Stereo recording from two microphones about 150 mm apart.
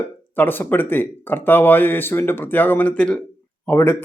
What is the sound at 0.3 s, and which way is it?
Speech, 15° left (ahead or behind).